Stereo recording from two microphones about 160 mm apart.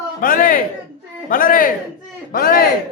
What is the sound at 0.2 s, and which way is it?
A man's voice, 60° left (ahead or behind).